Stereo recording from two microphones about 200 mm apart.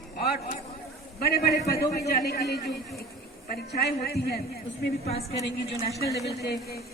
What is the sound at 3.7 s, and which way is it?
Speech, 50° left (ahead or behind).